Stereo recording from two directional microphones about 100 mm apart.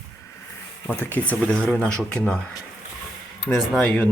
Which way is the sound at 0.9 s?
20° left (ahead or behind).